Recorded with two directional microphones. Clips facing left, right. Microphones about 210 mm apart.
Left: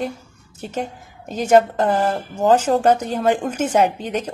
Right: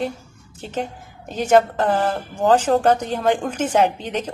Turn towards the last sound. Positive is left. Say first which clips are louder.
# left 1 dB
turn(degrees=10)  # may be behind; listen again after turning